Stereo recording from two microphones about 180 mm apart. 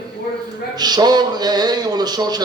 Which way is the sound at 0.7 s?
20° right (ahead or behind).